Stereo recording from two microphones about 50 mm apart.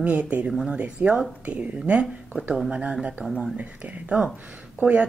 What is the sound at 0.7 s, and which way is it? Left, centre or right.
Speech, centre.